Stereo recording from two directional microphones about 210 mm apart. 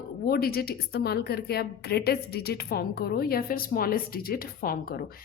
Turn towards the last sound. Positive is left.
turn(degrees=45)  # may be behind; listen again after turning